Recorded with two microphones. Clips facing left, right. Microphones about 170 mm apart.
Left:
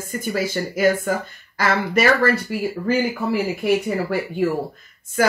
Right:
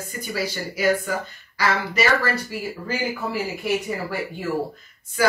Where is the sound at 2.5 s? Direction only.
60° left (ahead or behind).